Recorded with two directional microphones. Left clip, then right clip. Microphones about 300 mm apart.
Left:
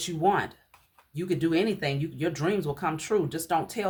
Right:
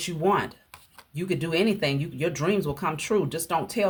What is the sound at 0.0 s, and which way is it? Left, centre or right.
Speech, centre.